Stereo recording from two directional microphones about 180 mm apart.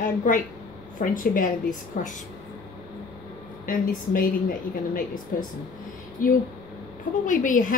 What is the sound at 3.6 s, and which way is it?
Speech, 50° left (ahead or behind).